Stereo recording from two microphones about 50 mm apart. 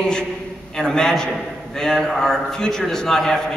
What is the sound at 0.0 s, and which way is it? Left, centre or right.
A man's voice, centre.